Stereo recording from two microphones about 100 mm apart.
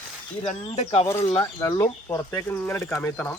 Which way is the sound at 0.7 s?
80° left.